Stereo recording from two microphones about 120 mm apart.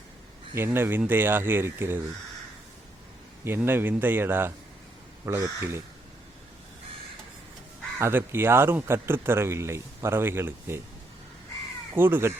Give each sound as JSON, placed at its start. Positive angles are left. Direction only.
{"t": 0.5, "sound": "a man's voice", "side_deg": -20}
{"t": 3.4, "sound": "a man's voice", "side_deg": -20}
{"t": 7.9, "sound": "a man's voice", "side_deg": -20}
{"t": 11.9, "sound": "a man's voice", "side_deg": -20}